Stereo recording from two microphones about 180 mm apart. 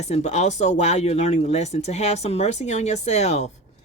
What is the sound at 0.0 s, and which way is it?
Speech, 40° left (ahead or behind).